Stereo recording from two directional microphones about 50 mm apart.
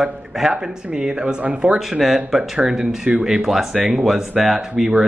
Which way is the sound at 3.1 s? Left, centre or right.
Right.